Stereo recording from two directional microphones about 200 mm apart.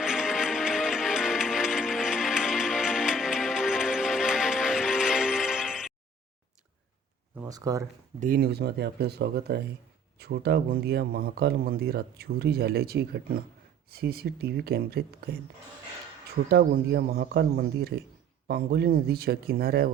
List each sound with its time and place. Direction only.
0.0 s music: 5° right (ahead or behind)
7.4 s speech: 15° right (ahead or behind)
8.2 s speech: 45° right (ahead or behind)
16.5 s speech: 50° right (ahead or behind)